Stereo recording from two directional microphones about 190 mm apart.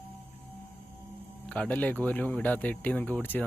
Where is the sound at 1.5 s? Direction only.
5° left (ahead or behind).